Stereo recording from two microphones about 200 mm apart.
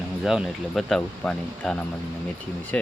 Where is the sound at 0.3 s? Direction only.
Centre (ahead or behind).